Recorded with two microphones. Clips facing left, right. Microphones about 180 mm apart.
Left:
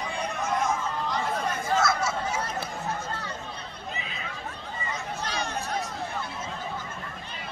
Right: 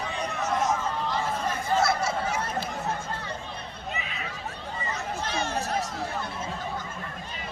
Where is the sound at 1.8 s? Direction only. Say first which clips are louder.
Right 1 dB; 30° right (ahead or behind).